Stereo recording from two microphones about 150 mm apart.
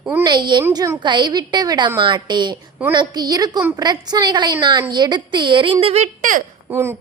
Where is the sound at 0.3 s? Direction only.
30° right (ahead or behind).